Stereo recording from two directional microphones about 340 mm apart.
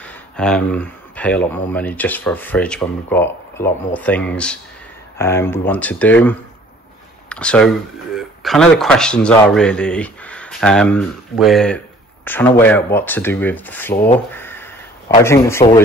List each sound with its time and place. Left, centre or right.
0.0 s speech: centre
13.9 s speech: left
14.3 s crow: centre
15.2 s a man's voice: centre